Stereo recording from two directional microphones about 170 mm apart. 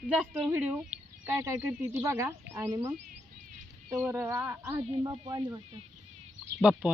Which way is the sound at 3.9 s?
15° right (ahead or behind).